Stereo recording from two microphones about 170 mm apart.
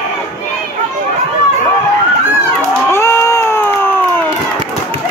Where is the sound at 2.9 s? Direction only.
15° left (ahead or behind).